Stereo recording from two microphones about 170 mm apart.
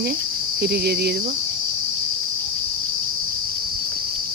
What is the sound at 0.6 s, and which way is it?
Cricket, 70° right (ahead or behind).